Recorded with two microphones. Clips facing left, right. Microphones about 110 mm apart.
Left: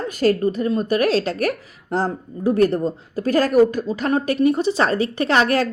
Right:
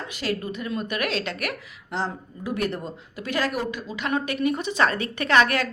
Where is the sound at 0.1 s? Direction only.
45° left (ahead or behind).